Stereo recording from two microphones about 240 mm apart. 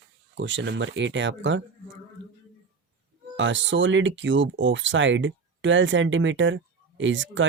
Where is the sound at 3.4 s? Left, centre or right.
Right.